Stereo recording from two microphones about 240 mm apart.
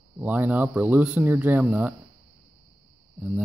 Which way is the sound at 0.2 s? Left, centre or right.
Centre.